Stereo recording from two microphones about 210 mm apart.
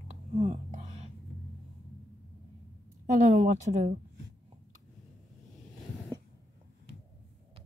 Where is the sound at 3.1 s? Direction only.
35° right (ahead or behind).